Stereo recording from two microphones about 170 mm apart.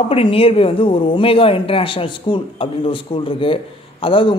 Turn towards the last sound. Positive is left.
turn(degrees=30)  # may be behind; listen again after turning